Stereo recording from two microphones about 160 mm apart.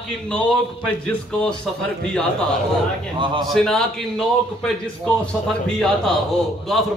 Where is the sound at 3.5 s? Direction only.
5° left (ahead or behind).